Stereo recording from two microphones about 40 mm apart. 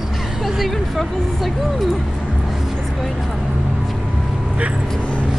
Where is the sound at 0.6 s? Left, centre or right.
Centre.